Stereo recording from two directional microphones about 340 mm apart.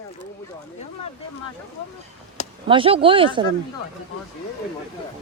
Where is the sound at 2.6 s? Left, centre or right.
Centre.